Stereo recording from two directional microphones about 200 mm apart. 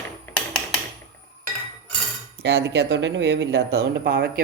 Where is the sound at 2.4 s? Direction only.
60° right (ahead or behind).